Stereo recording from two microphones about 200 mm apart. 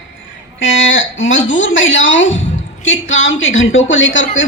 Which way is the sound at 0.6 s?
70° left (ahead or behind).